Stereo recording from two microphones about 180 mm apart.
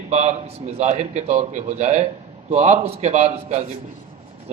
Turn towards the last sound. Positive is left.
turn(degrees=-35)  # may be behind; listen again after turning